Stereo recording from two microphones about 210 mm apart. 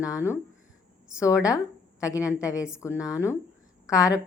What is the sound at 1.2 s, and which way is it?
A woman's voice, 15° left (ahead or behind).